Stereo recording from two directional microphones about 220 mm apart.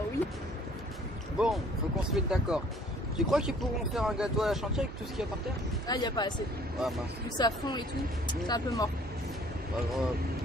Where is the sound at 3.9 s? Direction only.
5° right (ahead or behind).